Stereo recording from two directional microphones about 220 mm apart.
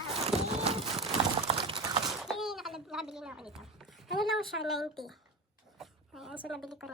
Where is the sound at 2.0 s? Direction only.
Centre (ahead or behind).